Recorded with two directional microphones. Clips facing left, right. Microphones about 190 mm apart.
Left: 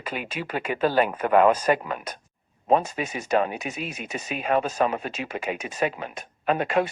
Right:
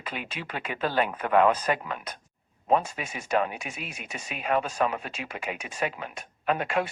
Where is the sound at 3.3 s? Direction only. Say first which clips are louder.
Left 3 dB; 30° left (ahead or behind).